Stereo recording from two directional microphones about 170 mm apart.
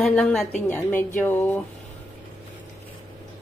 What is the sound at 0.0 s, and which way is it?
A woman's voice, 5° left (ahead or behind).